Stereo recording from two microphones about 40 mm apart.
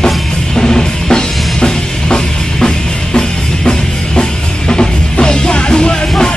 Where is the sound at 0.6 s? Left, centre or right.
Centre.